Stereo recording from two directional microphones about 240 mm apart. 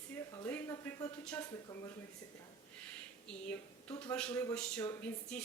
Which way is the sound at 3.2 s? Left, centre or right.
Centre.